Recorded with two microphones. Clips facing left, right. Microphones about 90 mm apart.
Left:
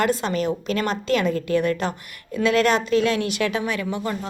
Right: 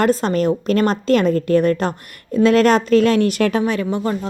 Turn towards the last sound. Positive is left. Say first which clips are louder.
# right 6 dB
turn(degrees=-35)  # may be behind; listen again after turning